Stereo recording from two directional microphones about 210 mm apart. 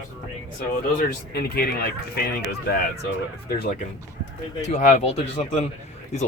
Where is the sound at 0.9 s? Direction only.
45° left (ahead or behind).